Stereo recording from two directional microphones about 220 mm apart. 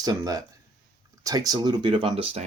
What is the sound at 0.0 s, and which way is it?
Speech, 15° right (ahead or behind).